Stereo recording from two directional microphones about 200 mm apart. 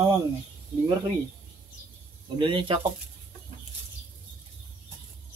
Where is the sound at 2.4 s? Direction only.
25° right (ahead or behind).